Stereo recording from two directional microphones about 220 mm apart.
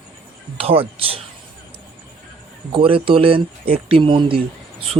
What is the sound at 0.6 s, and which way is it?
Speech, 25° right (ahead or behind).